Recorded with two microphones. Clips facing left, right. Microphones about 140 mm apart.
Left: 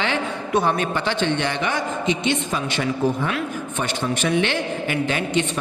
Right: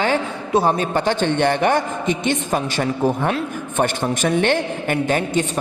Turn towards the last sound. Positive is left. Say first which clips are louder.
# right 3 dB
turn(degrees=-45)  # may be behind; listen again after turning